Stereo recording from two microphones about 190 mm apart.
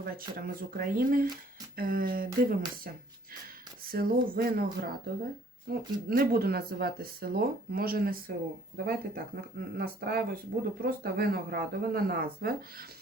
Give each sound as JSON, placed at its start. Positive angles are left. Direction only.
{"t": 0.0, "sound": "speech", "side_deg": -50}